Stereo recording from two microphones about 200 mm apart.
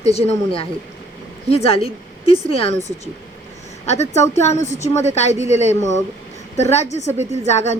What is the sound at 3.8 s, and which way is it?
A woman's voice, 35° left (ahead or behind).